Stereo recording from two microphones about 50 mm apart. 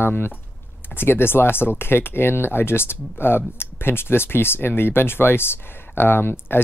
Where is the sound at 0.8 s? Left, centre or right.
Left.